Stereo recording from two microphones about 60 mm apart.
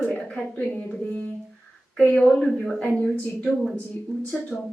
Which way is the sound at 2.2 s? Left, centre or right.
Centre.